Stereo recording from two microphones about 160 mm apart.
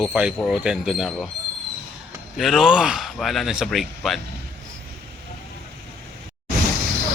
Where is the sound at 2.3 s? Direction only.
Centre (ahead or behind).